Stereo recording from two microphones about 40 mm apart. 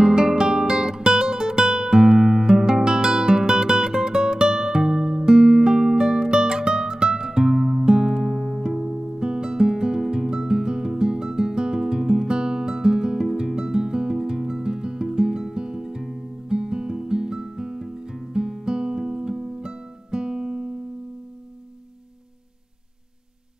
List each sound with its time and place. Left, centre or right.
0.0 s guitar: centre
16.4 s music: centre